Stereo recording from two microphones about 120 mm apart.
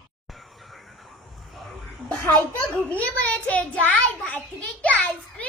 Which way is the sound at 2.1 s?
15° left (ahead or behind).